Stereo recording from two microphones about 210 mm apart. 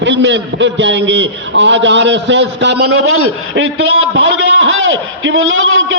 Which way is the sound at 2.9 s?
85° right.